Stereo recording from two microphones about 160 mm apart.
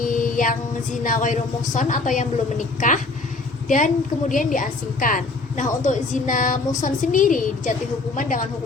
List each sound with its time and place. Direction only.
0.0 s female singing: 55° left (ahead or behind)
1.0 s speech: 55° left (ahead or behind)
3.7 s a woman's voice: 55° left (ahead or behind)